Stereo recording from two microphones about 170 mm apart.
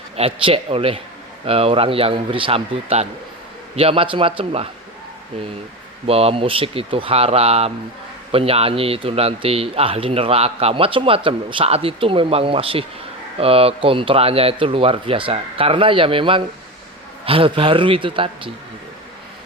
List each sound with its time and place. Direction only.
0.2 s speech: 35° right (ahead or behind)
6.1 s speech: 35° right (ahead or behind)